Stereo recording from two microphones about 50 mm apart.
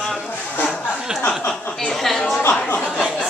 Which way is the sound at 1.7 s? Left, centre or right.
Centre.